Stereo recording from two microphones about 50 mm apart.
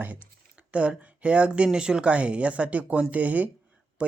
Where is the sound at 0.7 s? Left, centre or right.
Right.